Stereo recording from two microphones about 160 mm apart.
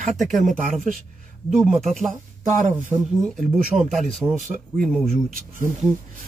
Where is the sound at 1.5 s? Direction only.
5° right (ahead or behind).